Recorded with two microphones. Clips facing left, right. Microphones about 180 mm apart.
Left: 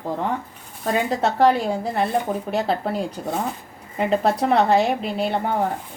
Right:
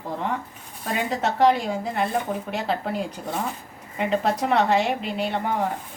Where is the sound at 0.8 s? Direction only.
35° left (ahead or behind).